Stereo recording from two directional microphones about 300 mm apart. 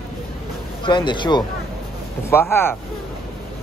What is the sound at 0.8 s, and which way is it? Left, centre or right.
Speech, centre.